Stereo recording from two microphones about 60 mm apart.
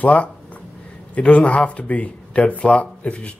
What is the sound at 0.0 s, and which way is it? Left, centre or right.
Speech, left.